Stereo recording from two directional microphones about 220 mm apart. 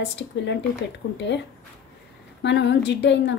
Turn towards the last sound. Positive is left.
turn(degrees=50)  # may be behind; listen again after turning